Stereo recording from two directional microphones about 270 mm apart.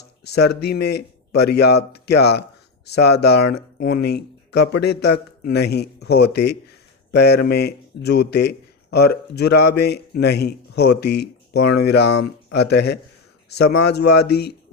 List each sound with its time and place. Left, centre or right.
0.3 s speech: left